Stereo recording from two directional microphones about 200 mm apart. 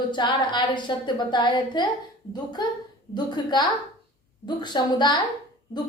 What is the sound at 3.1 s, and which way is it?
A woman's voice, 20° left (ahead or behind).